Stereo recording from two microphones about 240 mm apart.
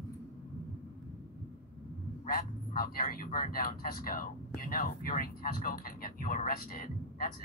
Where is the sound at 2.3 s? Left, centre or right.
Left.